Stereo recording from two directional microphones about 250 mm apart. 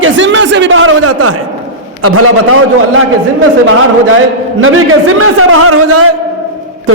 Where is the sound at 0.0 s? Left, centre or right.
Right.